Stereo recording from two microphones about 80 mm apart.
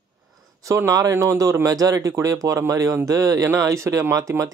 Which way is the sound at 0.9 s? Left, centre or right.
Right.